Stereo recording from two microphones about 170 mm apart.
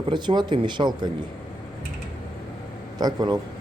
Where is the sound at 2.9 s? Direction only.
25° right (ahead or behind).